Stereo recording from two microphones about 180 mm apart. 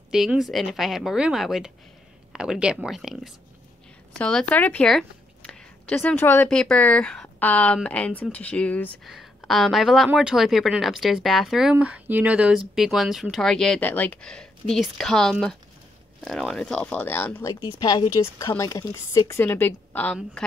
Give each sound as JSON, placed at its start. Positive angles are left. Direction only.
{"t": 0.1, "sound": "speech", "side_deg": 0}